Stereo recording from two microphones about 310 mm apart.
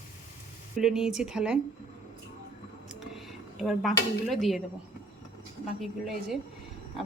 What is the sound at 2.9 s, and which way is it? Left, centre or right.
Speech, centre.